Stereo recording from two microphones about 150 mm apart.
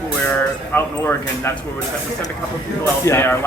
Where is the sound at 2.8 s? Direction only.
15° left (ahead or behind).